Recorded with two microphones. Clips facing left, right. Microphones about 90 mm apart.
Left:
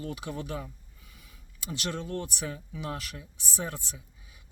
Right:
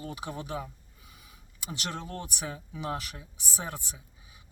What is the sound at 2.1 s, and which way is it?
Speech, 15° right (ahead or behind).